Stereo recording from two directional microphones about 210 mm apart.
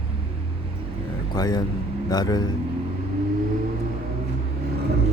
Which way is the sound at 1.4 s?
20° left (ahead or behind).